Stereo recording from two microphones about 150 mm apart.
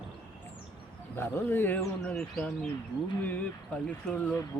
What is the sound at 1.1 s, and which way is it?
Speech, 15° left (ahead or behind).